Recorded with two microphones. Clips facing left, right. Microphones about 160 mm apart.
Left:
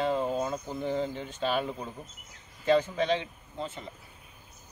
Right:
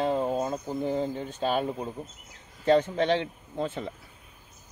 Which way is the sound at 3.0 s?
65° right (ahead or behind).